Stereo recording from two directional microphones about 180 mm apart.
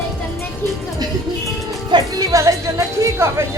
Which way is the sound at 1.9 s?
20° right (ahead or behind).